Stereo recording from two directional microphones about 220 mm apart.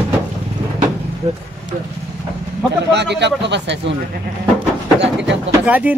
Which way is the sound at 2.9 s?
50° right (ahead or behind).